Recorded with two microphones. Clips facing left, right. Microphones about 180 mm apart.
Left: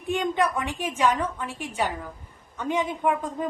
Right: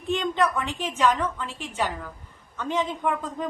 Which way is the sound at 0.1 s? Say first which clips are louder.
Even; 10° left (ahead or behind).